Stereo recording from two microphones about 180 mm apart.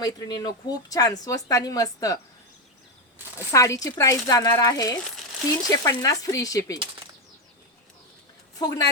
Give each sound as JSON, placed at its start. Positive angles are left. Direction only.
{"t": 0.0, "sound": "a woman's voice", "side_deg": 20}
{"t": 3.5, "sound": "a woman's voice", "side_deg": 15}
{"t": 8.5, "sound": "speech", "side_deg": 20}